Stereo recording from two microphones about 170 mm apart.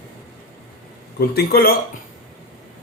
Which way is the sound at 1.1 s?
65° left (ahead or behind).